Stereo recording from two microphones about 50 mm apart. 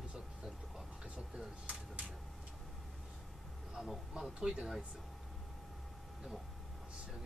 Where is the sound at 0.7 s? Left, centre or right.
Centre.